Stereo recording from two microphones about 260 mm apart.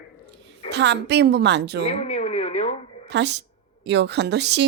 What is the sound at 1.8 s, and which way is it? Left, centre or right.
Speech, left.